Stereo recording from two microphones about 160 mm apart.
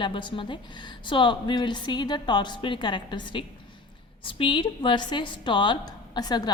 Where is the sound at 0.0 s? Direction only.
30° left (ahead or behind).